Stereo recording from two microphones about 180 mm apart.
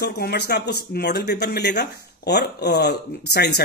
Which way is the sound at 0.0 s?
60° left (ahead or behind).